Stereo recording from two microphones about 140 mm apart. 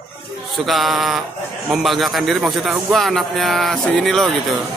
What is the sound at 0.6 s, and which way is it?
Mantra, centre (ahead or behind).